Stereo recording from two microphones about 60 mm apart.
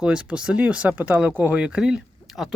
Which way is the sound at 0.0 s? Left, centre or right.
Centre.